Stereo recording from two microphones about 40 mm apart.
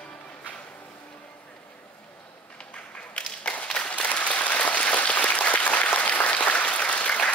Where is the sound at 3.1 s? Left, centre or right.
Left.